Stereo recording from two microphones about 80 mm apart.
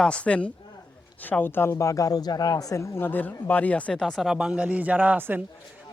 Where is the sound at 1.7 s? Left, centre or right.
Left; by 5.4 s right.